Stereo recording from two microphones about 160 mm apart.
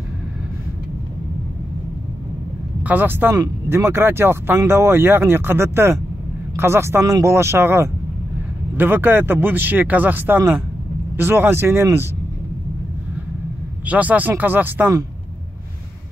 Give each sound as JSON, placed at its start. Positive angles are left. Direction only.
{"t": 2.8, "sound": "speech", "side_deg": -10}
{"t": 13.8, "sound": "speech", "side_deg": -10}